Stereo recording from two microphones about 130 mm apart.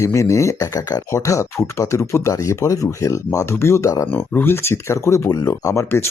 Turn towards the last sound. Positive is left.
turn(degrees=20)  # may be behind; listen again after turning